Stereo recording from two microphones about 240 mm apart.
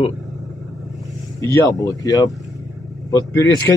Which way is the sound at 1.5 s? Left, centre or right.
Centre.